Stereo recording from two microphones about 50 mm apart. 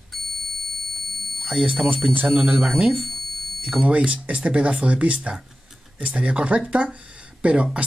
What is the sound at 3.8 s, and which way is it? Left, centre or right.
Speech, right.